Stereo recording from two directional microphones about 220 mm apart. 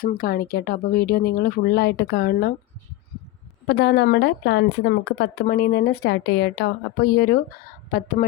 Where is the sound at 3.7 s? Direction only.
45° left (ahead or behind).